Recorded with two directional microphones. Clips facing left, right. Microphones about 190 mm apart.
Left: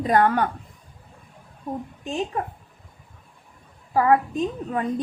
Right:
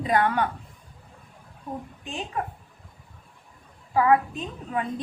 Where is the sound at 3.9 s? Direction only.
40° left (ahead or behind).